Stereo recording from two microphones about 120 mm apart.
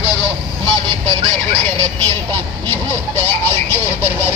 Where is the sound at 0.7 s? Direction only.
40° right (ahead or behind).